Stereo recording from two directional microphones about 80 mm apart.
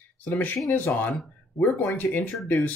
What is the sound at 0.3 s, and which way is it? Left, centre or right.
Speech, left.